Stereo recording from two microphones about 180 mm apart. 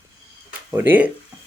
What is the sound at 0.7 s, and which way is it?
Speech, 10° right (ahead or behind).